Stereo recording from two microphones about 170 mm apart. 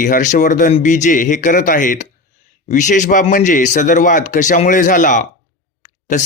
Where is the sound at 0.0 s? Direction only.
50° left (ahead or behind).